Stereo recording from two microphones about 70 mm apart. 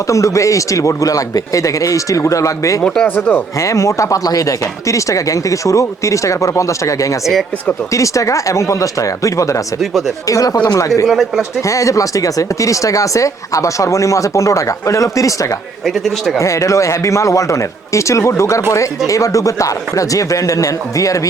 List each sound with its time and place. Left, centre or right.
0.1 s speech: left
2.8 s speech: centre
3.2 s speech: left
3.6 s speech: left
11.0 s speech: centre
11.7 s speech: left
16.4 s speech: left